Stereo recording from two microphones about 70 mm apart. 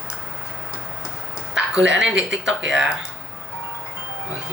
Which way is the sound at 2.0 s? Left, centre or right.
Centre.